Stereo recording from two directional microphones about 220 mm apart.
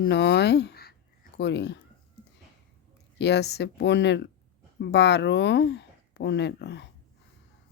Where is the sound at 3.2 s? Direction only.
50° left (ahead or behind).